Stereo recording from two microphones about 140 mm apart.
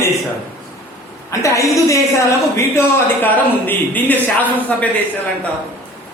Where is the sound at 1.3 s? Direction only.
20° left (ahead or behind).